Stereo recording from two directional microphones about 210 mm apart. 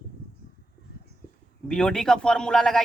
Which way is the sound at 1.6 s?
5° left (ahead or behind).